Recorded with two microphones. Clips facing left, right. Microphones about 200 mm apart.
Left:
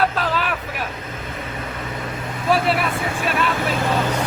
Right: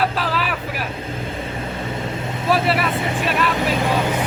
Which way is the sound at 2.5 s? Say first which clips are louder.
Even; centre (ahead or behind).